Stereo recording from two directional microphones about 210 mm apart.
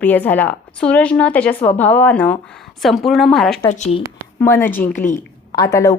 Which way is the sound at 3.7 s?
30° left (ahead or behind).